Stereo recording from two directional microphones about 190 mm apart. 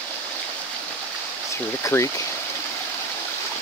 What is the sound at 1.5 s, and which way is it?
Speech, 15° left (ahead or behind).